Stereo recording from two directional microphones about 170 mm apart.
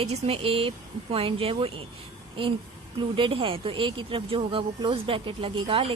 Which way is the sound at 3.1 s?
30° right (ahead or behind).